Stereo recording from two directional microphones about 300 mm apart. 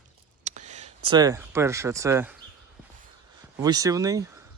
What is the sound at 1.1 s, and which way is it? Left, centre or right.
Speech, centre.